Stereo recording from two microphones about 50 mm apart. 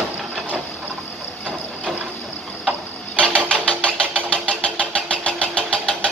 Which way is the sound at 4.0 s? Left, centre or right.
Left.